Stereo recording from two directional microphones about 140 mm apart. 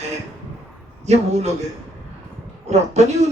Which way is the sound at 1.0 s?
50° right (ahead or behind).